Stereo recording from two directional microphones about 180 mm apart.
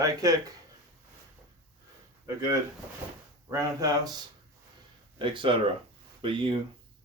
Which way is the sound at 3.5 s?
20° right (ahead or behind).